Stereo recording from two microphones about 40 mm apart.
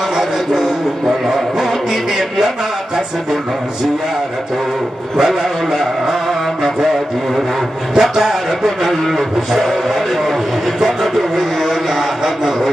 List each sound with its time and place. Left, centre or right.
1.2 s music: centre
5.1 s a sound: centre
7.9 s music: centre